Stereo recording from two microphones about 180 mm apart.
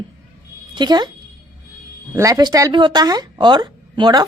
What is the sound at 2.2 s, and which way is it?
A woman's voice, 20° right (ahead or behind).